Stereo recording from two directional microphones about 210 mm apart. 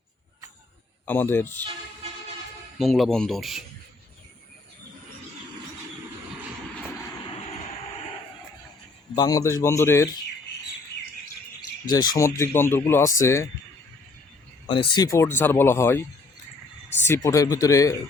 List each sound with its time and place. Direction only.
1.0 s speech: 10° left (ahead or behind)
2.7 s speech: centre (ahead or behind)
9.1 s speech: 15° left (ahead or behind)
11.9 s speech: 20° left (ahead or behind)
14.7 s speech: 25° left (ahead or behind)